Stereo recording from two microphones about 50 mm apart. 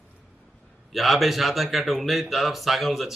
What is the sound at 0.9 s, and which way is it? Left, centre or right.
A man's voice, centre.